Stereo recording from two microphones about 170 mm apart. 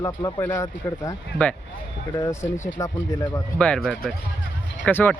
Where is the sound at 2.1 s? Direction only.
20° left (ahead or behind).